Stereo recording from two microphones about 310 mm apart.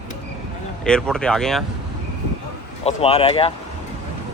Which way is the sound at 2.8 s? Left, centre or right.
Centre.